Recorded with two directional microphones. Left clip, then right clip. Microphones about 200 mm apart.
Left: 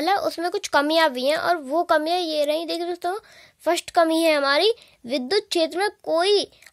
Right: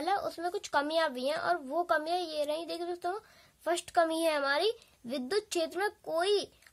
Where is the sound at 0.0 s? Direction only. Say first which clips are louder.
Left 10 dB; 30° left (ahead or behind).